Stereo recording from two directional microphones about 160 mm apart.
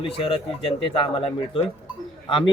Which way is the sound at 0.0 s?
35° left (ahead or behind).